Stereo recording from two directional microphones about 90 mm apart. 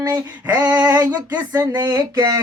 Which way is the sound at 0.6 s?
50° right (ahead or behind).